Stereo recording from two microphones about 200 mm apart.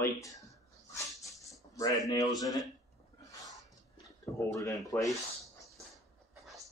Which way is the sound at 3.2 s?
15° left (ahead or behind).